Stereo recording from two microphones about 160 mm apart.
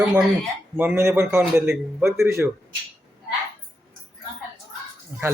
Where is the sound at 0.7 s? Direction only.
15° right (ahead or behind).